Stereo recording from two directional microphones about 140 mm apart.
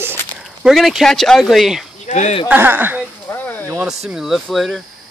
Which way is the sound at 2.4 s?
15° right (ahead or behind).